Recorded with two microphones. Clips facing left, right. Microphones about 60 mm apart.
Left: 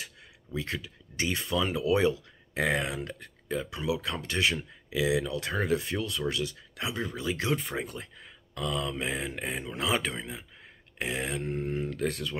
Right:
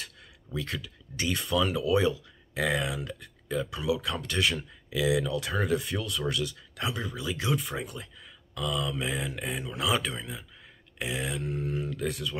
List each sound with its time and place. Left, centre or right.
0.6 s speech: left